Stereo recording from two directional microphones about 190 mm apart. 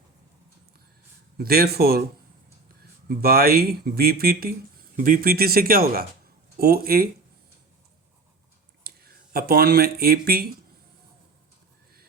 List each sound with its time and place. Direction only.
1.4 s speech: 55° right (ahead or behind)
3.1 s speech: 50° right (ahead or behind)
8.8 s speech: 55° right (ahead or behind)